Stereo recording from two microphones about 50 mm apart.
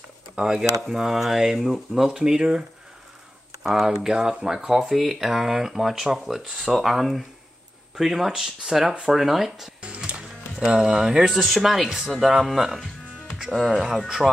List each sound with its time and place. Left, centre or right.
0.4 s speech: centre
3.6 s speech: centre
4.9 s speech: centre
9.8 s music: right
11.3 s speech: centre